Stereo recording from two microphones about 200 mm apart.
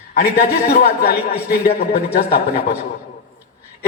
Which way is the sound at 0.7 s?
50° left (ahead or behind).